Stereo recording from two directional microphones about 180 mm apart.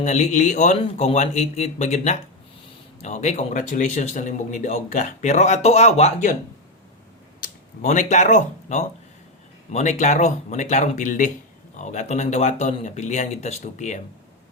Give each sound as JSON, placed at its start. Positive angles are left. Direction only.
{"t": 0.0, "sound": "speech", "side_deg": 40}
{"t": 7.4, "sound": "speech", "side_deg": 45}